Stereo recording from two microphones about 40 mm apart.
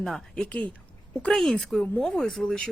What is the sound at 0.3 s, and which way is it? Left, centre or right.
Speech, left.